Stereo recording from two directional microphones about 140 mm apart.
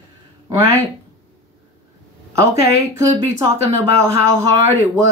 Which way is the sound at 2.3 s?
20° right (ahead or behind).